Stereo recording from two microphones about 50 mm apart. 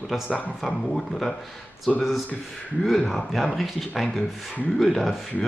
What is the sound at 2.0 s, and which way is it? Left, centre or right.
Speech, centre.